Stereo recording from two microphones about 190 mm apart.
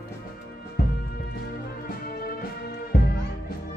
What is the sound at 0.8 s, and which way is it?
Music, 55° left (ahead or behind).